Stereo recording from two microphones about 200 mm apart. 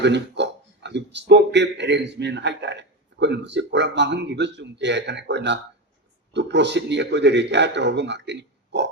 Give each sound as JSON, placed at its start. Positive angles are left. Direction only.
{"t": 0.0, "sound": "a man's voice", "side_deg": -60}